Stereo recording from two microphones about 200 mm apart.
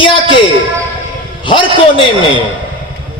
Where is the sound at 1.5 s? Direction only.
25° left (ahead or behind).